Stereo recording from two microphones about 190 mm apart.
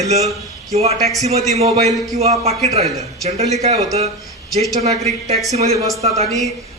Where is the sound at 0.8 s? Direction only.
35° right (ahead or behind).